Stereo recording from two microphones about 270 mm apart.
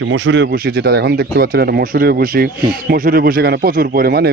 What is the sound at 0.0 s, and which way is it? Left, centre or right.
Speech, right.